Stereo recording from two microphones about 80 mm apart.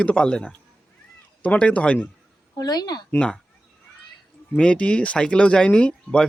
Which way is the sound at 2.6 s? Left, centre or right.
Left.